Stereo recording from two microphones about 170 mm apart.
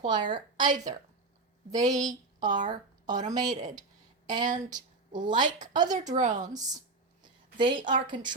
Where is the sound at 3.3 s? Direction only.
25° right (ahead or behind).